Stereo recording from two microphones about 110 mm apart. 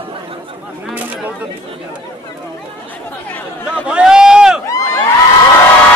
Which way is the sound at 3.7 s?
10° right (ahead or behind).